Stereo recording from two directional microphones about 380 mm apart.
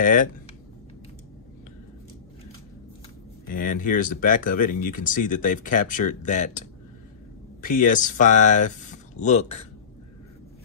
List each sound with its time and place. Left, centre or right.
0.0 s speech: left
3.4 s speech: left
7.6 s speech: left